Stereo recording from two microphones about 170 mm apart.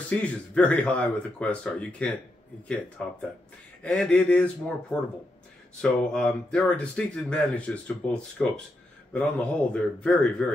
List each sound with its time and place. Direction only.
0.2 s speech: 10° left (ahead or behind)